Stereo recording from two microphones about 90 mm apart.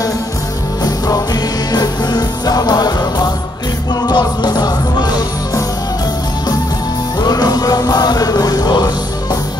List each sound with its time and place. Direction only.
0.8 s music: 45° left (ahead or behind)
7.2 s music: 50° left (ahead or behind)